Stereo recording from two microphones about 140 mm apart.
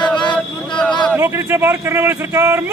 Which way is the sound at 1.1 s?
15° right (ahead or behind).